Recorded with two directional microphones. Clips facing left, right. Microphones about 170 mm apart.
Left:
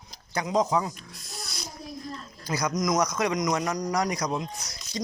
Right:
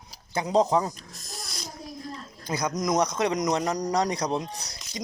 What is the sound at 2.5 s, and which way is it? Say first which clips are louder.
A man's voice: even; 25° right (ahead or behind).